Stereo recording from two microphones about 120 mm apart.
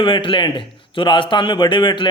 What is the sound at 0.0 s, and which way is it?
A man's voice, 45° left (ahead or behind).